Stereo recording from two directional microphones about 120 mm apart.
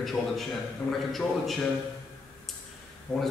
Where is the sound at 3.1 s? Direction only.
10° left (ahead or behind).